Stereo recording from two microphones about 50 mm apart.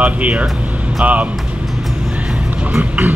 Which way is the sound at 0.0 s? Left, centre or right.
Right.